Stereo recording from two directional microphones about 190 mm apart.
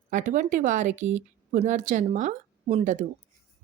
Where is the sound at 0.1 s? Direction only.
40° right (ahead or behind).